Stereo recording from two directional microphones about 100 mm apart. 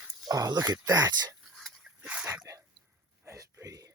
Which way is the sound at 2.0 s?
15° right (ahead or behind).